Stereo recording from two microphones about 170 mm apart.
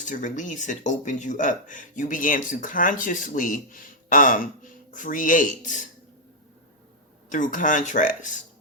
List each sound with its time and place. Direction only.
0.0 s speech: 50° left (ahead or behind)
7.3 s speech: 50° left (ahead or behind)